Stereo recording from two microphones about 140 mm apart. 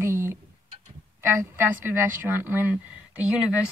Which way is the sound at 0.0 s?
20° right (ahead or behind).